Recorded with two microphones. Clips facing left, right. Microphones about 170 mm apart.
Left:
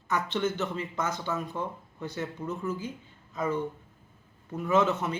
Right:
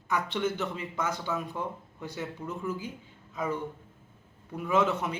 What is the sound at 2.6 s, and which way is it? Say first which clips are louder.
Speech: left 1 dB; 10° right (ahead or behind).